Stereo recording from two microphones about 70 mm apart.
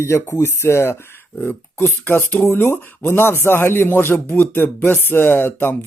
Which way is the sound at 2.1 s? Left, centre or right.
Left.